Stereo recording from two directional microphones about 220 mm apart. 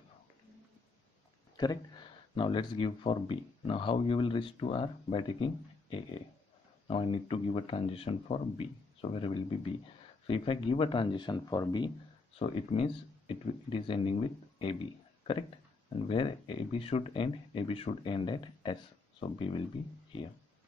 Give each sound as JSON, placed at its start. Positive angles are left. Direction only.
{"t": 1.6, "sound": "speech", "side_deg": 20}